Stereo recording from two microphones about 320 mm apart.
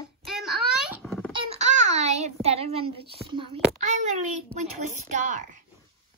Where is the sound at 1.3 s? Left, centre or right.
Centre.